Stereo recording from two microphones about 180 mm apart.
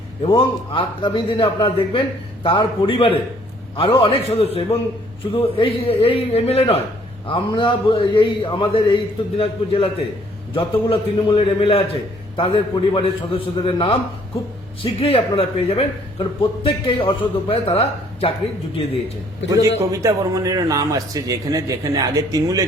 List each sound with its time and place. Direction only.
0.2 s a man's voice: 30° left (ahead or behind)
19.5 s a man's voice: 20° right (ahead or behind)